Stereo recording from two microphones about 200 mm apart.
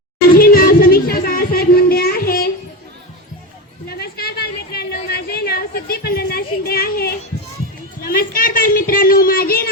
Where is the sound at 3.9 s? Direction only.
50° left (ahead or behind).